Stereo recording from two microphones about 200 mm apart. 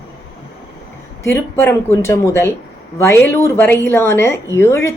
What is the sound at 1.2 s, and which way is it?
A woman's voice, 10° left (ahead or behind).